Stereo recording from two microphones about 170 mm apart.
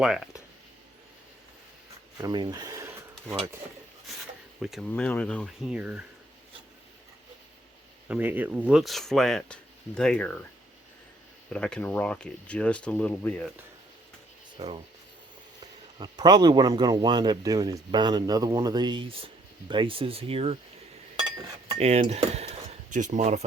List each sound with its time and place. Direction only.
0.0 s speech: 5° right (ahead or behind)
2.1 s a sound: 25° right (ahead or behind)
4.6 s speech: centre (ahead or behind)
4.9 s speech: 10° left (ahead or behind)
5.7 s speech: 5° right (ahead or behind)
8.0 s speech: 10° right (ahead or behind); by 10.3 s 5° left (ahead or behind)
11.4 s speech: 5° left (ahead or behind)
14.6 s a man's voice: 35° right (ahead or behind)
21.8 s cutlery: 35° right (ahead or behind)
22.9 s a man's voice: 45° right (ahead or behind)